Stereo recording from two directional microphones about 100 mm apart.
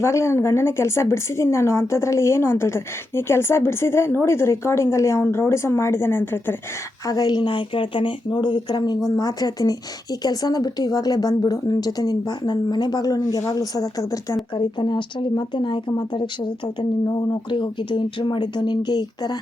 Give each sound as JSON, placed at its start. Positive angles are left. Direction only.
{"t": 0.0, "sound": "a woman's voice", "side_deg": 30}
{"t": 7.0, "sound": "speech", "side_deg": 40}
{"t": 14.5, "sound": "speech", "side_deg": 50}